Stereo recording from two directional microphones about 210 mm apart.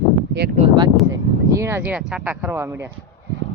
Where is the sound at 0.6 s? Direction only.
20° right (ahead or behind).